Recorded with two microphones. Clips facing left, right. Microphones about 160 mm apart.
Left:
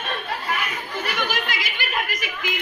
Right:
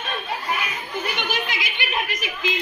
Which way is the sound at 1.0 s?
20° right (ahead or behind).